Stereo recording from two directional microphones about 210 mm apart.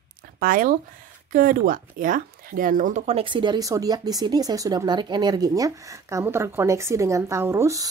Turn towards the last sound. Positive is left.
turn(degrees=-15)  # may be behind; listen again after turning